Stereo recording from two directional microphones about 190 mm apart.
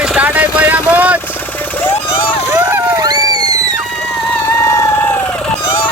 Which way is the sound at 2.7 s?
20° right (ahead or behind).